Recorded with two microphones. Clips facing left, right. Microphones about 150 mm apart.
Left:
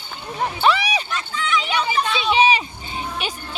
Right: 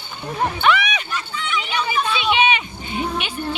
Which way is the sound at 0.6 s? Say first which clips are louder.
Left 1 dB; 35° left (ahead or behind).